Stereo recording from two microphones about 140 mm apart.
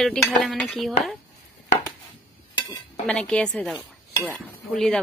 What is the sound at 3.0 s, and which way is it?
Speech, 5° left (ahead or behind).